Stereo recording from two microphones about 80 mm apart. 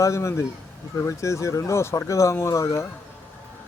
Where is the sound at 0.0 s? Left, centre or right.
Left.